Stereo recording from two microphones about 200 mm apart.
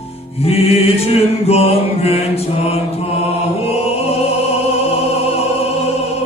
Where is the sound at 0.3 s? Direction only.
30° left (ahead or behind).